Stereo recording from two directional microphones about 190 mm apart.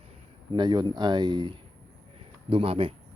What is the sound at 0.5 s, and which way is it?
Speech, 25° right (ahead or behind).